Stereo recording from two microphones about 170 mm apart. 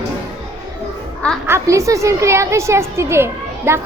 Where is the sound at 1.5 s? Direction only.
15° right (ahead or behind).